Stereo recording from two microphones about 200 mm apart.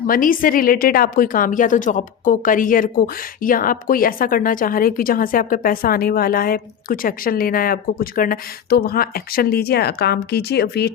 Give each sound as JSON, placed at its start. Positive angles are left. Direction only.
{"t": 0.1, "sound": "a woman's voice", "side_deg": 45}